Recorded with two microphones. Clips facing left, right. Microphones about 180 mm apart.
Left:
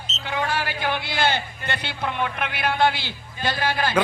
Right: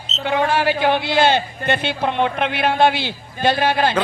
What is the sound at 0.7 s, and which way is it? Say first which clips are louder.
Speech: right 8 dB; 60° right (ahead or behind).